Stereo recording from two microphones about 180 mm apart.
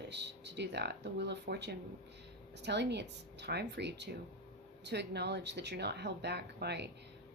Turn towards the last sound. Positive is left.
turn(degrees=-65)  # may be behind; listen again after turning